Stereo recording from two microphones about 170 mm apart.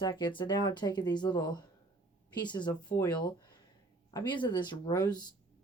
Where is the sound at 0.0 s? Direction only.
25° left (ahead or behind).